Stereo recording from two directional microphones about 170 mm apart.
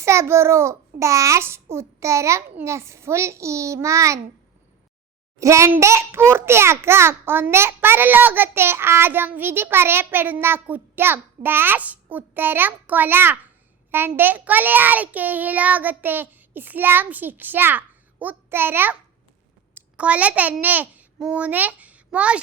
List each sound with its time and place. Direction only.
0.0 s a child's voice: 15° right (ahead or behind)
5.4 s a child's voice: 15° right (ahead or behind)